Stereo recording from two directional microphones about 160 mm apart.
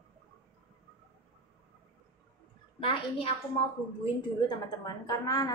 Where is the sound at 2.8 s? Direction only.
35° left (ahead or behind).